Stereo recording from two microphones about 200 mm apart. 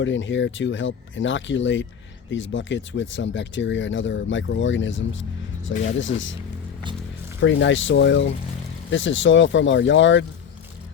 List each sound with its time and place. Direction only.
0.0 s speech: 70° left (ahead or behind)
7.4 s speech: 65° left (ahead or behind)